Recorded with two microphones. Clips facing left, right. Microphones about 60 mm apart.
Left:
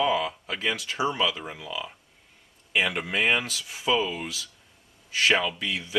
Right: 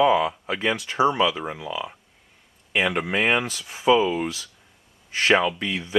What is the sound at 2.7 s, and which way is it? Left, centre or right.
Speech, centre.